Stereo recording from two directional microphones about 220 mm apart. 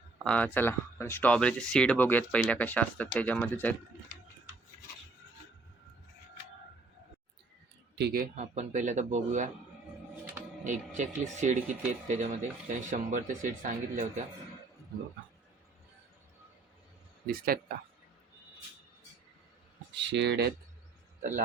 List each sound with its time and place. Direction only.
0.3 s speech: 5° left (ahead or behind)
7.9 s speech: 45° right (ahead or behind)
10.6 s speech: 35° right (ahead or behind)
20.0 s speech: 50° right (ahead or behind)
21.2 s speech: 35° right (ahead or behind)